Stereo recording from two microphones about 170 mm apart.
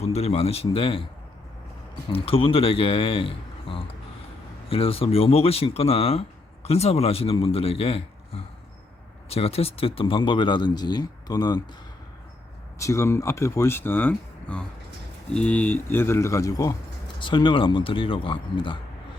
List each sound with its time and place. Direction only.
0.0 s speech: 40° left (ahead or behind)
2.1 s speech: 35° left (ahead or behind)
12.8 s speech: 20° left (ahead or behind)